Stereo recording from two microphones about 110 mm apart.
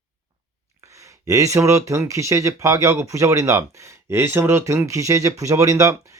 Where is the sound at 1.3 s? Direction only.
30° right (ahead or behind).